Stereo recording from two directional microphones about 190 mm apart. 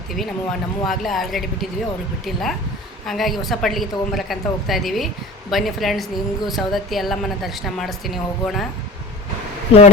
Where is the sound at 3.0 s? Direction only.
Centre (ahead or behind).